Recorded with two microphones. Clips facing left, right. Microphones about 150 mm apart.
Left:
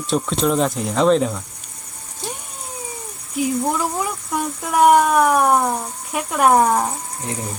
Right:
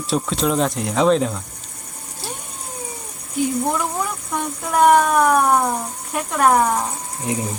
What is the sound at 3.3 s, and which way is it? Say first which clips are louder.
Speech: even; 5° left (ahead or behind).